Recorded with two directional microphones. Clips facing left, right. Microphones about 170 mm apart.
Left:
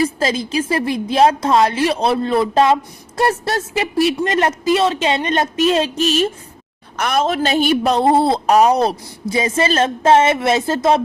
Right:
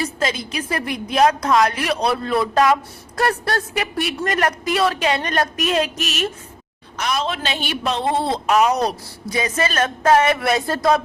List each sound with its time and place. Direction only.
0.2 s a man's voice: 30° left (ahead or behind)
6.9 s speech: 55° left (ahead or behind)
7.3 s a man's voice: 40° left (ahead or behind); by 11.0 s 25° left (ahead or behind)